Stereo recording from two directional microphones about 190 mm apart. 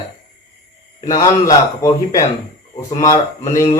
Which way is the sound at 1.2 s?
15° left (ahead or behind).